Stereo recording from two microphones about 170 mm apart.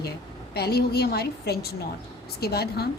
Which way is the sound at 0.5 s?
70° left (ahead or behind).